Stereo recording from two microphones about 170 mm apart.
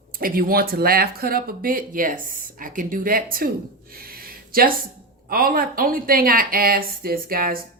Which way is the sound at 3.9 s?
60° right (ahead or behind).